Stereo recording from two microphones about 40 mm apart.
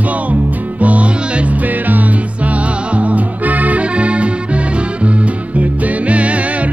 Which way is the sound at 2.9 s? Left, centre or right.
Right.